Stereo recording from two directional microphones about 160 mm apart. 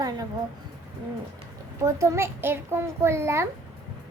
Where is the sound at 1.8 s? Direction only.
20° right (ahead or behind).